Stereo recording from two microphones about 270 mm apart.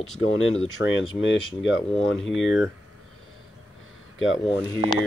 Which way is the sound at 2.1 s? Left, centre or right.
Centre.